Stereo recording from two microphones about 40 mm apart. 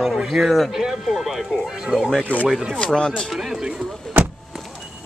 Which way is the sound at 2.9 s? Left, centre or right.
Centre.